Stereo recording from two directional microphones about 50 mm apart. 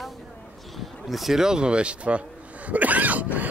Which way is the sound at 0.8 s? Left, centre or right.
Centre.